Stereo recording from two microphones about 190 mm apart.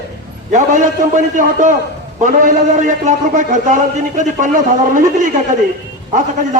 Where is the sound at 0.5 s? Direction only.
40° right (ahead or behind).